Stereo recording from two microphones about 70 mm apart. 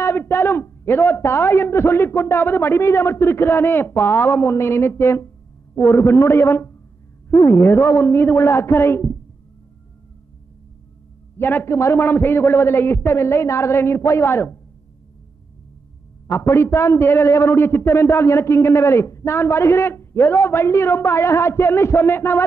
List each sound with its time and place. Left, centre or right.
0.0 s a man's voice: left
11.3 s a man's voice: left
16.3 s a man's voice: left